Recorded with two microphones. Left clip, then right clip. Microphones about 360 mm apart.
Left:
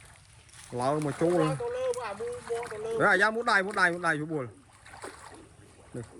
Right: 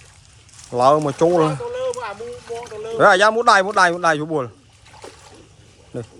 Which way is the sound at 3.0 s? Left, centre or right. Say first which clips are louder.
Right 11 dB; centre.